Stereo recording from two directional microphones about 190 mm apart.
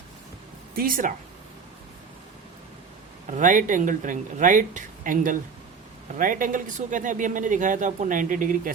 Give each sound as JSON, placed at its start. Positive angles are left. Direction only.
{"t": 0.8, "sound": "speech", "side_deg": -45}
{"t": 3.3, "sound": "speech", "side_deg": -45}